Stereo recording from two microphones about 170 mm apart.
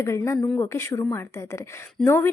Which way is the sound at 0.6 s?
15° left (ahead or behind).